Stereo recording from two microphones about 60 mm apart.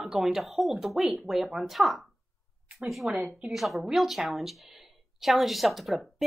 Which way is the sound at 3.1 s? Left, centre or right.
Centre.